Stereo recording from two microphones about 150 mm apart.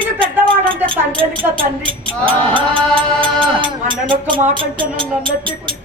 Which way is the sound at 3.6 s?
35° right (ahead or behind).